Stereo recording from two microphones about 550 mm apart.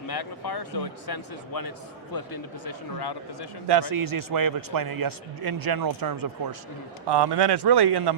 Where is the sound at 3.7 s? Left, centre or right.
Right.